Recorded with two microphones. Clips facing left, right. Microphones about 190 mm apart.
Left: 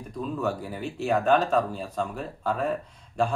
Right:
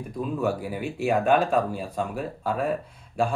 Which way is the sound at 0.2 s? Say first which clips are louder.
Right 2 dB; 10° right (ahead or behind).